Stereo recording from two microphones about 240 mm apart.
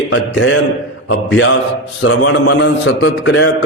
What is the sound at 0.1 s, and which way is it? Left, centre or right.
A man's voice, left.